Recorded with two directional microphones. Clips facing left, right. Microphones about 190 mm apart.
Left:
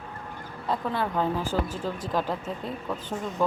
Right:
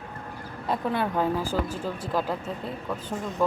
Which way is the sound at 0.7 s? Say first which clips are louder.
Right 1 dB; 15° right (ahead or behind).